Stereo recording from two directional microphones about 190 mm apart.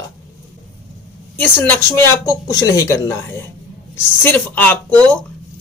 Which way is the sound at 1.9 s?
15° left (ahead or behind).